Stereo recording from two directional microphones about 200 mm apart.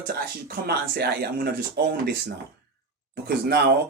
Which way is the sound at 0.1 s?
50° right (ahead or behind).